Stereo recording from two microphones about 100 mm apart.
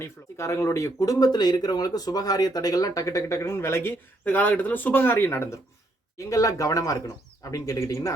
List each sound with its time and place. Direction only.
0.0 s speech: 30° left (ahead or behind)